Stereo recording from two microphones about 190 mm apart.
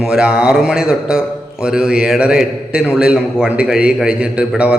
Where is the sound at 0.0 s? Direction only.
5° right (ahead or behind).